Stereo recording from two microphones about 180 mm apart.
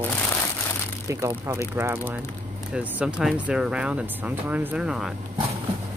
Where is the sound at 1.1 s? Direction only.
15° right (ahead or behind).